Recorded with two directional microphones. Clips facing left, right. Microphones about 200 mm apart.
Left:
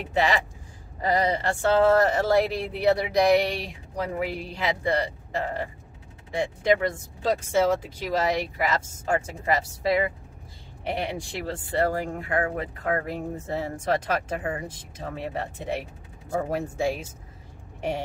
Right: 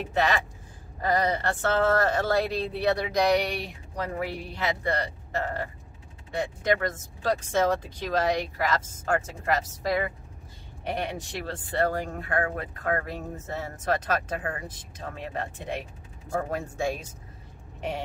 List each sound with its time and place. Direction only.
1.0 s speech: 10° left (ahead or behind)